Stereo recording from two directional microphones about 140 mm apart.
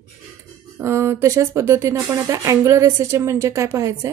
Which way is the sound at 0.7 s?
20° right (ahead or behind).